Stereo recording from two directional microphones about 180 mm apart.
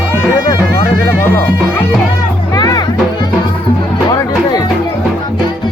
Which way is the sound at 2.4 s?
20° left (ahead or behind).